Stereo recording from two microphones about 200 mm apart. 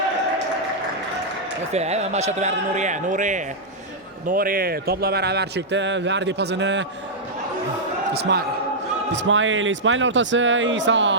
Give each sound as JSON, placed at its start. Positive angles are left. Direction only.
{"t": 1.7, "sound": "a man's voice", "side_deg": -35}
{"t": 8.1, "sound": "speech", "side_deg": -55}
{"t": 9.1, "sound": "speech", "side_deg": -70}